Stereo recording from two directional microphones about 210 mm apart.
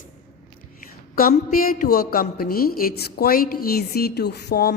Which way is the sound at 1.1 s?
40° left (ahead or behind).